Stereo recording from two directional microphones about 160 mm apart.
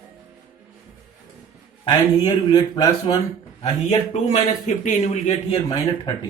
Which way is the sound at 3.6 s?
45° left (ahead or behind).